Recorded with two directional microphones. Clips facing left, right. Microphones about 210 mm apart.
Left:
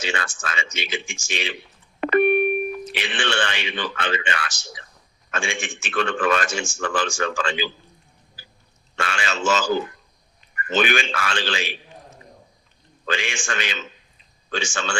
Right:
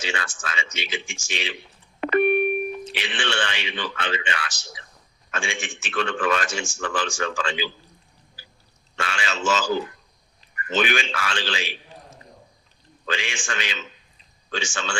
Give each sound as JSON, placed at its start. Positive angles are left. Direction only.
{"t": 0.0, "sound": "a man's voice", "side_deg": 50}
{"t": 2.0, "sound": "beep", "side_deg": 50}
{"t": 2.9, "sound": "a man's voice", "side_deg": 50}
{"t": 9.0, "sound": "a man's voice", "side_deg": 50}
{"t": 10.7, "sound": "a man's voice", "side_deg": 50}
{"t": 13.1, "sound": "a man's voice", "side_deg": 50}